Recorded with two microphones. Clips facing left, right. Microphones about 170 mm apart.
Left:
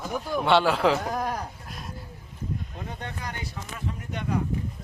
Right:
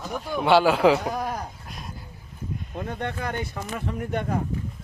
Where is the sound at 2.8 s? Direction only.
55° right (ahead or behind).